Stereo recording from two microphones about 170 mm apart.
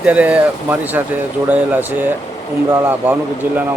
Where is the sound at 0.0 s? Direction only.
10° right (ahead or behind).